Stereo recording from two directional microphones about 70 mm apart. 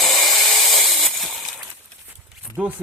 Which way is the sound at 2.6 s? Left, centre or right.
Right.